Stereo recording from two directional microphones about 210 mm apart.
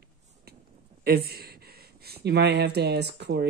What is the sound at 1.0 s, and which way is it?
Speech, 50° right (ahead or behind).